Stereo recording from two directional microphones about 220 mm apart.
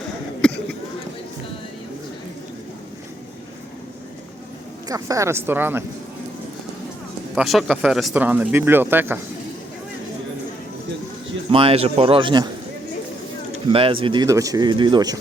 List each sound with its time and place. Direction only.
4.9 s speech: 15° right (ahead or behind)
7.3 s speech: centre (ahead or behind)
11.5 s speech: 25° right (ahead or behind)
13.7 s speech: 25° right (ahead or behind)